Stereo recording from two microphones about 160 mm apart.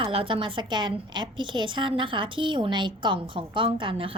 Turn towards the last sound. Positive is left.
turn(degrees=-35)  # may be behind; listen again after turning